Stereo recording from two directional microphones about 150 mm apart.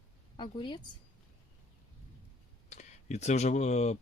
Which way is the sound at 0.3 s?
35° left (ahead or behind).